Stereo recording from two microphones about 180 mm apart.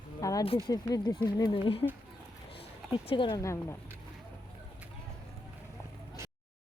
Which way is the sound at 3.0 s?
25° left (ahead or behind).